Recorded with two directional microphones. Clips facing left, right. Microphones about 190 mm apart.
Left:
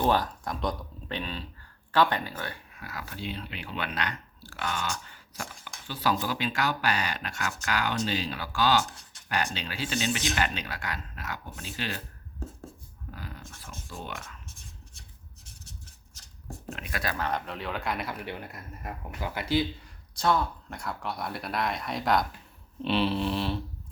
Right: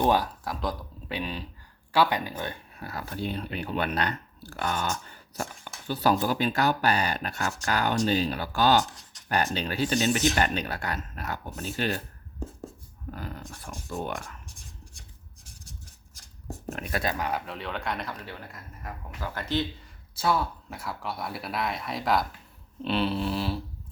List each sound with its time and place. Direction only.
0.0 s speech: 10° right (ahead or behind)
2.7 s speech: 35° right (ahead or behind)
13.1 s speech: 50° right (ahead or behind)
16.6 s speech: 40° right (ahead or behind)
17.0 s speech: 20° right (ahead or behind)
17.2 s speech: 5° right (ahead or behind)
18.3 s speech: 20° left (ahead or behind)
20.1 s speech: 5° right (ahead or behind)